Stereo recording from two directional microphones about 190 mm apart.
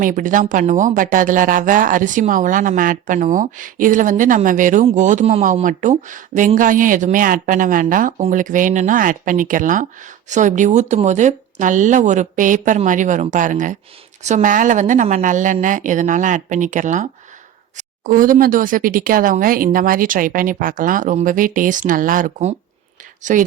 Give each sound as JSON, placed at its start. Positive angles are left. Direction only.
{"t": 0.0, "sound": "speech", "side_deg": -45}